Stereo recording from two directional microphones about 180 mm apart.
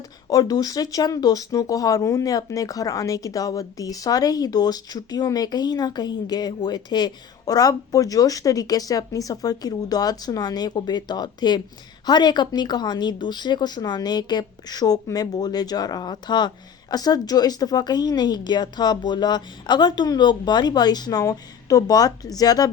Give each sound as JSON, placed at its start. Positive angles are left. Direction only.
{"t": 0.3, "sound": "speech", "side_deg": 20}